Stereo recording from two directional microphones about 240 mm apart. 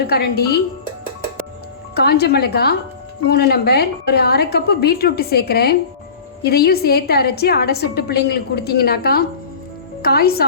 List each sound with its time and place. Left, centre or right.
0.1 s a woman's voice: left
2.0 s a woman's voice: left